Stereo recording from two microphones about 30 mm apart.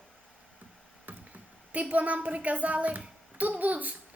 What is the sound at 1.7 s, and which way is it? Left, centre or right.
A woman's voice, right.